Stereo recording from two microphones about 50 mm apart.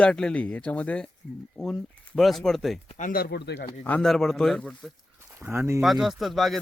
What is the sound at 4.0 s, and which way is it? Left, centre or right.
Speech, centre.